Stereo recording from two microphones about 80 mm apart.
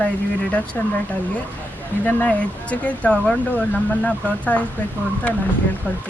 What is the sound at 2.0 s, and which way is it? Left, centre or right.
Speech, centre.